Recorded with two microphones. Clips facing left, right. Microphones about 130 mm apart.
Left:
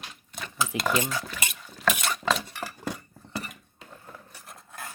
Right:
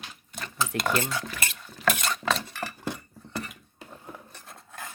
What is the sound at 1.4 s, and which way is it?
Stir, 10° left (ahead or behind).